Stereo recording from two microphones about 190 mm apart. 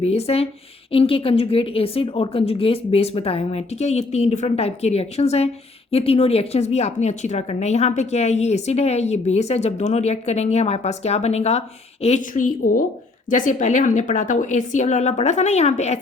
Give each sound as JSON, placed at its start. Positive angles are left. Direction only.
{"t": 0.0, "sound": "a woman's voice", "side_deg": 30}